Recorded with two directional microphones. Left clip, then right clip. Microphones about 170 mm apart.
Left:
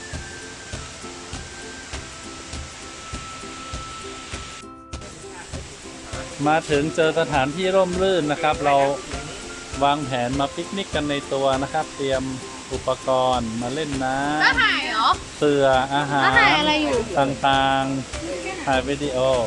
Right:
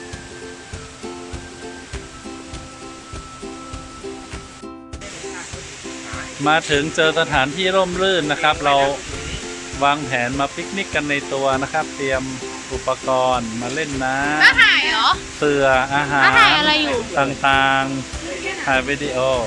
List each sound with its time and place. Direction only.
6.4 s speech: 10° right (ahead or behind)
14.4 s speech: 40° left (ahead or behind)
15.4 s speech: 15° right (ahead or behind)